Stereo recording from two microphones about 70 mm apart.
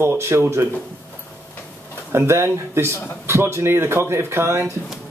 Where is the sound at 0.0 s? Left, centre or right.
Right.